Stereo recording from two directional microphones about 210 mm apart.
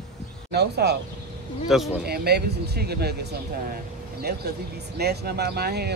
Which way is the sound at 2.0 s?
50° right (ahead or behind).